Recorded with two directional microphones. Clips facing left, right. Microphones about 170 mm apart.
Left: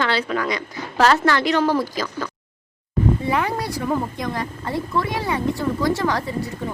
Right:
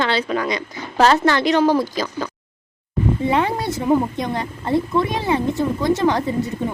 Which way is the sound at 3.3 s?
25° right (ahead or behind).